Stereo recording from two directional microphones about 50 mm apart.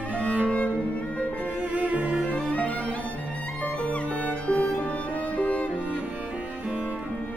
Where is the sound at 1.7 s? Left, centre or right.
Right.